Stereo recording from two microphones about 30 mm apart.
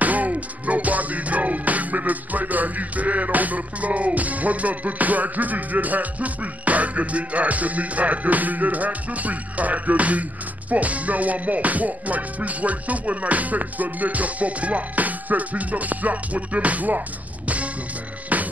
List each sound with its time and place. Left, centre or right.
0.0 s music: right
18.3 s music: right